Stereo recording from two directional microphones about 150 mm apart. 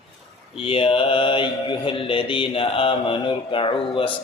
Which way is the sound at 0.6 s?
40° left (ahead or behind).